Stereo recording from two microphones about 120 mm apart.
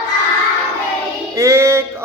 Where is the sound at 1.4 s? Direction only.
25° right (ahead or behind).